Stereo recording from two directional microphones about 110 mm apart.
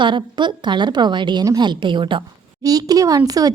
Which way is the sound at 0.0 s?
45° right (ahead or behind).